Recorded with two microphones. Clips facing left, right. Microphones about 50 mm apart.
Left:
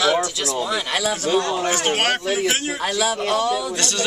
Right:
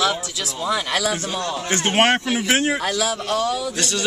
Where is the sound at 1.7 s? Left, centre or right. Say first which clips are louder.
Right 2 dB; right.